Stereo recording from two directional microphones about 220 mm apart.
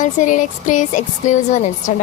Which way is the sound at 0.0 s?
35° left (ahead or behind).